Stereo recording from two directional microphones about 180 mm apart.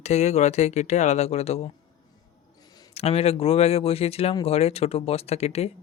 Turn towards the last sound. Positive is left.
turn(degrees=35)  # may be behind; listen again after turning